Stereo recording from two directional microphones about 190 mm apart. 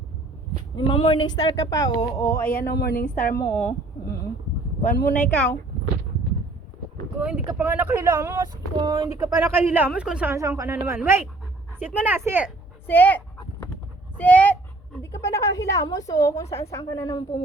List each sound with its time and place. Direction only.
0.8 s speech: 25° left (ahead or behind)
2.5 s speech: 55° left (ahead or behind)
3.2 s a woman's voice: 10° left (ahead or behind)
4.8 s speech: 50° left (ahead or behind)
5.1 s a woman's voice: 5° left (ahead or behind)
7.2 s speech: 5° right (ahead or behind)
12.9 s a woman's voice: 10° left (ahead or behind)